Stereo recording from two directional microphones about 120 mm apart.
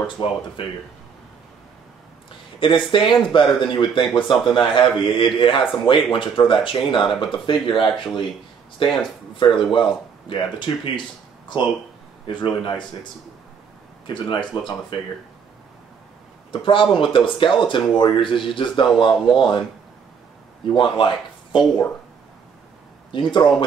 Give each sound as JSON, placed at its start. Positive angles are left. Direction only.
{"t": 0.0, "sound": "speech", "side_deg": 45}
{"t": 2.6, "sound": "speech", "side_deg": 45}
{"t": 12.3, "sound": "speech", "side_deg": 40}
{"t": 16.6, "sound": "speech", "side_deg": 45}
{"t": 20.7, "sound": "speech", "side_deg": 40}
{"t": 23.1, "sound": "speech", "side_deg": 40}